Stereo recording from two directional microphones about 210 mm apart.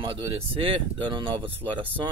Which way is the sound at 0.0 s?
25° right (ahead or behind).